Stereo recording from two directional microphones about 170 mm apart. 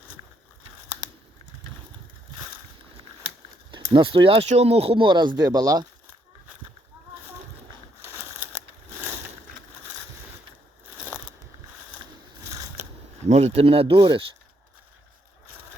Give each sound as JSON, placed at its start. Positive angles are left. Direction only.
{"t": 3.7, "sound": "speech", "side_deg": -25}
{"t": 12.5, "sound": "scissors", "side_deg": -20}
{"t": 13.2, "sound": "speech", "side_deg": -40}